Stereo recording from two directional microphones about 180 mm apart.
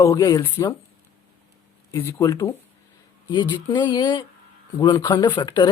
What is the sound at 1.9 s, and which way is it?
Speech, 15° left (ahead or behind).